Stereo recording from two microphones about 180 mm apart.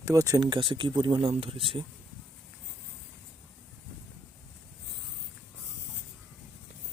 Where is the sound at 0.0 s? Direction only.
15° right (ahead or behind).